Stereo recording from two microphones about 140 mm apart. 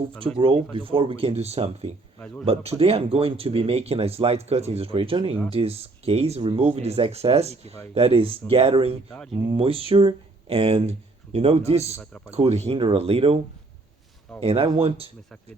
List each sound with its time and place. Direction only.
0.2 s speech: 40° right (ahead or behind)
14.4 s speech: 40° right (ahead or behind)